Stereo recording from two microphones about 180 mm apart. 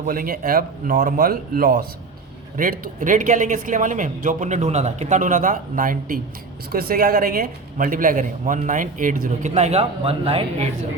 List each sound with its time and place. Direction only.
0.0 s speech: 50° right (ahead or behind); by 10.7 s 30° right (ahead or behind)